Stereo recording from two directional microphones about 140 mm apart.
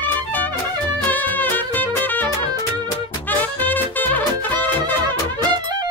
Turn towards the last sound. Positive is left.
turn(degrees=15)  # may be behind; listen again after turning